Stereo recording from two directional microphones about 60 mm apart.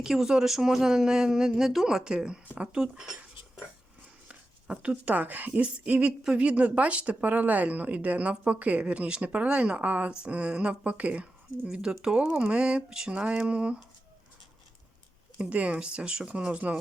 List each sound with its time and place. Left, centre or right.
0.0 s speech: centre
4.3 s speech: centre
15.4 s speech: right